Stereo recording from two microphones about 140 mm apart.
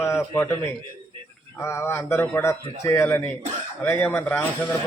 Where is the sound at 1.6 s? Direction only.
20° left (ahead or behind).